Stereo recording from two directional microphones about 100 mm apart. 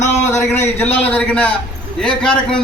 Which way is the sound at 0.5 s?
25° left (ahead or behind).